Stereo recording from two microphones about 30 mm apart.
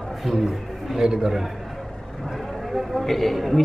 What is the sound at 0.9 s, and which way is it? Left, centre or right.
Speech, centre.